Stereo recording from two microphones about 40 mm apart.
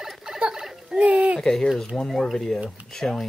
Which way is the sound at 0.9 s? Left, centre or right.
Right.